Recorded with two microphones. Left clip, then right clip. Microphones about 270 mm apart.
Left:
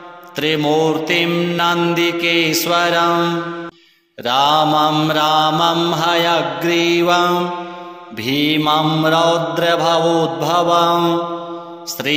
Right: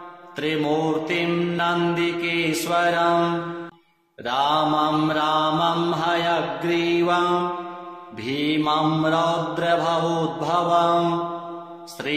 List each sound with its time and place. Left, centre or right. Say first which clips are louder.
0.4 s mantra: left 7 dB; left
12.0 s mantra: left 8 dB; left